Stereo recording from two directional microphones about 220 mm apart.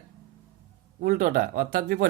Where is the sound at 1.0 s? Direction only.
40° right (ahead or behind).